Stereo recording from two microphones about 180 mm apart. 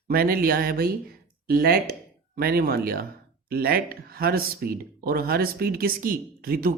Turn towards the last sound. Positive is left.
turn(degrees=-55)  # may be behind; listen again after turning